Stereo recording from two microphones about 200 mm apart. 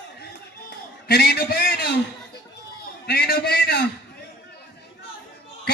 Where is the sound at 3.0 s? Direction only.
50° left (ahead or behind).